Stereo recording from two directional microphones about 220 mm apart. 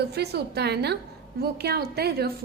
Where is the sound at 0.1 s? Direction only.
50° right (ahead or behind).